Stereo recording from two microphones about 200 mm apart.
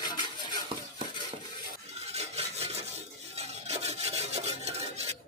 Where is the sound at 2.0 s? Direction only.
30° right (ahead or behind).